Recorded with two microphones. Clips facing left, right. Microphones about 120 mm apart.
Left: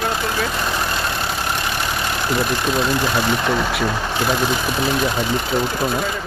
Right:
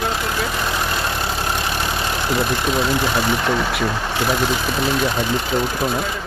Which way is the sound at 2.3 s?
Centre (ahead or behind).